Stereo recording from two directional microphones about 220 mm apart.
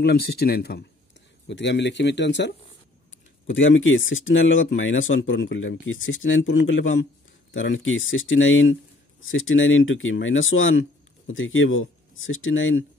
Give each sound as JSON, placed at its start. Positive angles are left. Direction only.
{"t": 0.0, "sound": "speech", "side_deg": 45}
{"t": 3.4, "sound": "speech", "side_deg": 60}